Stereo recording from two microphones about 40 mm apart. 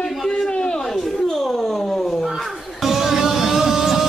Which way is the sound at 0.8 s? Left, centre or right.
Centre.